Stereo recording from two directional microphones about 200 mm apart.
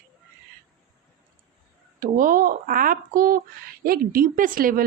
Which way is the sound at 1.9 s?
45° right (ahead or behind).